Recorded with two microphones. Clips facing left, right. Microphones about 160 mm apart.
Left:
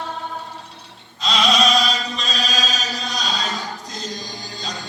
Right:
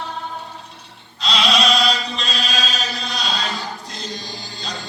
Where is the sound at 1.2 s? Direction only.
45° left (ahead or behind).